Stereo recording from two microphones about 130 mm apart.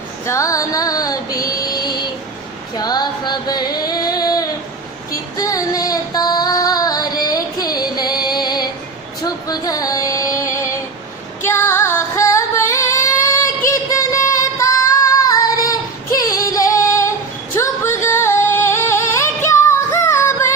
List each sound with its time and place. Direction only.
0.3 s music: 25° left (ahead or behind)
1.5 s a sound: 30° left (ahead or behind)
5.4 s female singing: 25° left (ahead or behind)
10.4 s a sound: 25° left (ahead or behind)
11.4 s music: 20° left (ahead or behind)
17.5 s singing: 20° left (ahead or behind)